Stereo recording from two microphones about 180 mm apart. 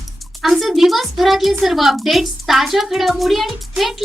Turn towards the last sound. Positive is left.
turn(degrees=0)  # may be behind; listen again after turning